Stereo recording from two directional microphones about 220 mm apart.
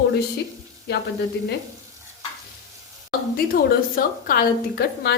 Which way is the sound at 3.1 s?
40° left (ahead or behind).